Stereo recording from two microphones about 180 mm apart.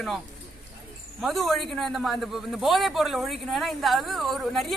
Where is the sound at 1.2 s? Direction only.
Centre (ahead or behind).